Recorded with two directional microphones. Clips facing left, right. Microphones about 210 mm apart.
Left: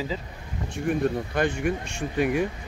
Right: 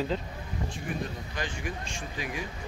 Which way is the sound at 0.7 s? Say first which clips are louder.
Left 14 dB; 60° left (ahead or behind).